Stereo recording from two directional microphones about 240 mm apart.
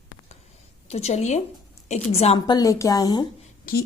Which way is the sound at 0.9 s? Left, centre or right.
Left.